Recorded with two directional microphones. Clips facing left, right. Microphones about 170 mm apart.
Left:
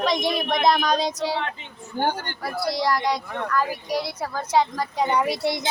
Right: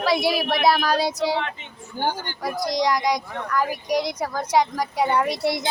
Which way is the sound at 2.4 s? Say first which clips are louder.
Right 2 dB; 15° right (ahead or behind).